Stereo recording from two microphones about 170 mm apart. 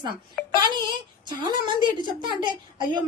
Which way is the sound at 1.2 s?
25° right (ahead or behind).